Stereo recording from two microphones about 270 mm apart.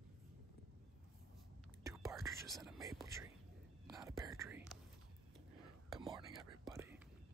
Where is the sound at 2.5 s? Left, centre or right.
Centre.